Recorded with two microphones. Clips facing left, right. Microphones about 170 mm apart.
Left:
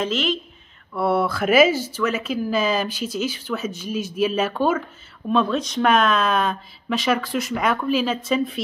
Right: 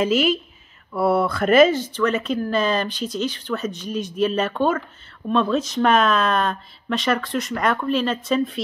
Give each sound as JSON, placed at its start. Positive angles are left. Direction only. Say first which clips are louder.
{"t": 0.0, "sound": "speech", "louder": "right 4 dB", "side_deg": -10}